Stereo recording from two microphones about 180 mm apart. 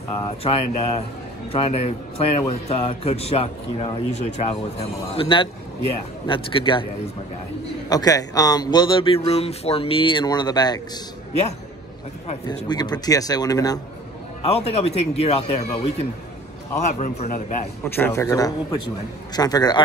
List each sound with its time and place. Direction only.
0.2 s a man's voice: 30° left (ahead or behind)
7.9 s speech: 20° left (ahead or behind)
12.6 s speech: 25° left (ahead or behind)
14.5 s a man's voice: 35° left (ahead or behind)
17.8 s speech: 10° left (ahead or behind)